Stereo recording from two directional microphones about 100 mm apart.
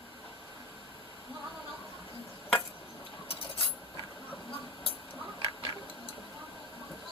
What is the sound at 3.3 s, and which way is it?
Cutlery, 70° left (ahead or behind).